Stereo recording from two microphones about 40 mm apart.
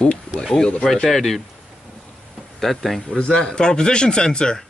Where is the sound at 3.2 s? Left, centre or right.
Left.